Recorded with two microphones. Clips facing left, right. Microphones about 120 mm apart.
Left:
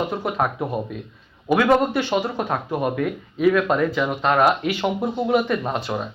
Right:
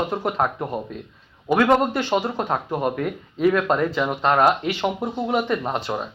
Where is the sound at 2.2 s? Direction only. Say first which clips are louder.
Even; centre (ahead or behind).